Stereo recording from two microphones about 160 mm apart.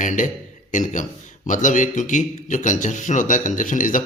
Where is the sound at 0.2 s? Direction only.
55° left (ahead or behind).